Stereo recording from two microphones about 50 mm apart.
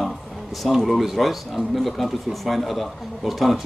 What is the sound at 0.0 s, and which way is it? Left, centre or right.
Speech, centre.